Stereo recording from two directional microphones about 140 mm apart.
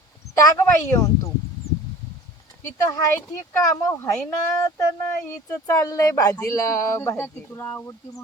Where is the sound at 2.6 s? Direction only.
20° left (ahead or behind).